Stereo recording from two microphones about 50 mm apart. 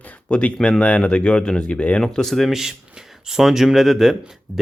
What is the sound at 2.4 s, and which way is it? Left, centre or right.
Speech, centre.